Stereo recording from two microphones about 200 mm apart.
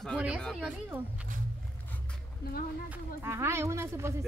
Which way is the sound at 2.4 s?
50° left (ahead or behind).